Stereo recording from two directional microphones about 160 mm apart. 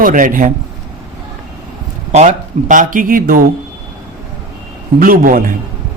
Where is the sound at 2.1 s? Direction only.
50° right (ahead or behind).